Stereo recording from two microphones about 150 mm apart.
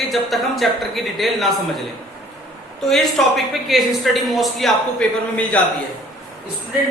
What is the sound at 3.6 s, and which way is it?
A man's voice, centre (ahead or behind).